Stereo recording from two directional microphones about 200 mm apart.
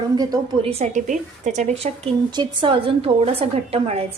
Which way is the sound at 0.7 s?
35° right (ahead or behind).